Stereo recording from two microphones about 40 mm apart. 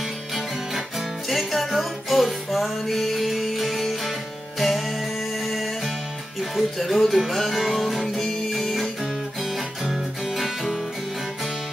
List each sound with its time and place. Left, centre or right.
1.3 s music: centre
6.5 s music: centre
8.2 s music: centre
9.8 s music: centre